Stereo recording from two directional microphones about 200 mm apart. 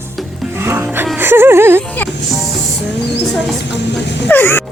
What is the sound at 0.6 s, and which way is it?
Speech, 10° right (ahead or behind).